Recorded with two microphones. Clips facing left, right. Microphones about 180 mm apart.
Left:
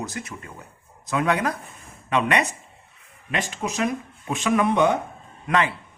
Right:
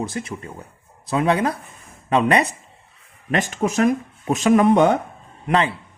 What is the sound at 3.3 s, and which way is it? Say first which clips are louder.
Speech: right 7 dB; 50° right (ahead or behind).